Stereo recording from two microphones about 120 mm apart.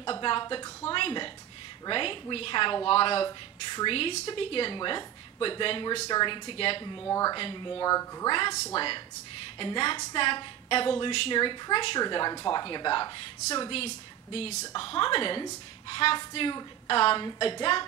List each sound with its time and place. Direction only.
0.0 s a sound: 40° left (ahead or behind)
1.9 s a woman's voice: 45° left (ahead or behind)
7.1 s speech: 30° left (ahead or behind)
7.3 s a woman's voice: 40° left (ahead or behind)
8.3 s a woman's voice: 40° left (ahead or behind)
13.7 s a woman's voice: 50° left (ahead or behind)
14.8 s a woman's voice: 45° left (ahead or behind)